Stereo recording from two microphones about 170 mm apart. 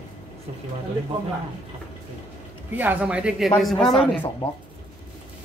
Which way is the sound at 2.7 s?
10° right (ahead or behind).